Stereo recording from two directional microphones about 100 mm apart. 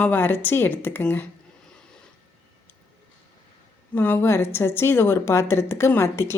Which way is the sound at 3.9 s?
20° left (ahead or behind).